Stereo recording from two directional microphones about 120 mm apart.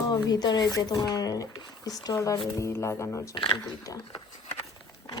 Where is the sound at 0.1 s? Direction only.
35° left (ahead or behind).